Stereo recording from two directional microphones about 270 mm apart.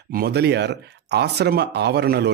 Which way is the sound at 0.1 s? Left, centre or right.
Right.